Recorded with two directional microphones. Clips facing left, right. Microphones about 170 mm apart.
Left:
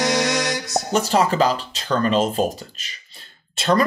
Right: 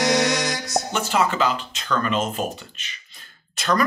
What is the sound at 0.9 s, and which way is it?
Speech, 40° left (ahead or behind).